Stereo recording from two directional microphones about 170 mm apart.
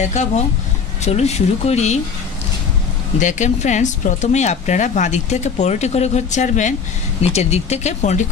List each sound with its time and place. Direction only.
0.0 s speech: 45° left (ahead or behind)
3.2 s speech: 45° left (ahead or behind)